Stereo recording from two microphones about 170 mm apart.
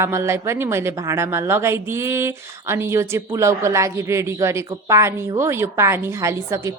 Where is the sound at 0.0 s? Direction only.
15° right (ahead or behind).